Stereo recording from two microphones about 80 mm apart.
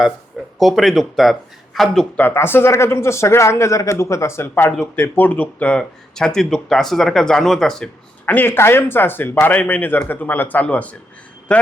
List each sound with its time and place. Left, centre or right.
0.6 s speech: centre
2.3 s speech: left; by 7.9 s centre
8.3 s speech: left